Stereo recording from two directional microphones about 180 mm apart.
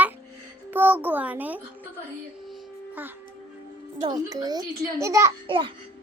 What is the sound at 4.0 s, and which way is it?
A child's voice, 25° right (ahead or behind).